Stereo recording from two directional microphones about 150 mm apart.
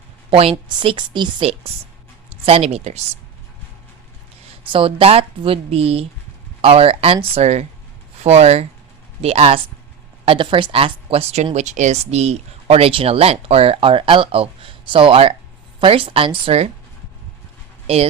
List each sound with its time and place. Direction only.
0.3 s a woman's voice: 40° right (ahead or behind)
4.6 s speech: 35° right (ahead or behind)
17.8 s speech: 40° right (ahead or behind)